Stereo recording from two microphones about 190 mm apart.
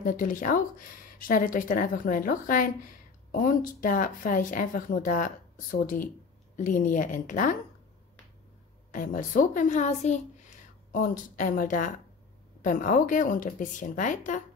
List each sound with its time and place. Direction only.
0.0 s speech: 45° left (ahead or behind)
8.9 s speech: 45° left (ahead or behind)